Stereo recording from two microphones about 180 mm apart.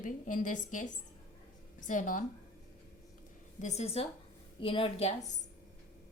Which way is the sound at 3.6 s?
35° left (ahead or behind).